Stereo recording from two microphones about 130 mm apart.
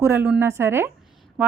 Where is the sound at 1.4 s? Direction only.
10° right (ahead or behind).